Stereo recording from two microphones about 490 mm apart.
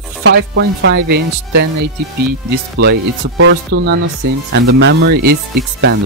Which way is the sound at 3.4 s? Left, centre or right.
Right.